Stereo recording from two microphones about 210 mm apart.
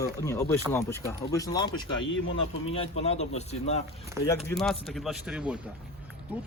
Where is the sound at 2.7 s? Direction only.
30° left (ahead or behind).